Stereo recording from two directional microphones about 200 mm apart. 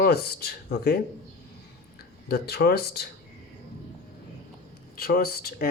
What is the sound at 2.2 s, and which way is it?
Speech, 55° left (ahead or behind).